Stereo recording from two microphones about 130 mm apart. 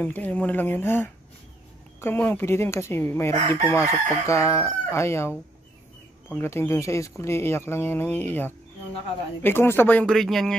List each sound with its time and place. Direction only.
0.0 s speech: 10° left (ahead or behind)
2.0 s chicken: 20° left (ahead or behind)
6.3 s speech: 15° left (ahead or behind)